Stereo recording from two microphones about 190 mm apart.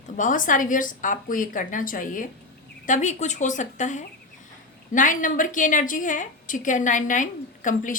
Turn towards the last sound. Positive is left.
turn(degrees=45)  # may be behind; listen again after turning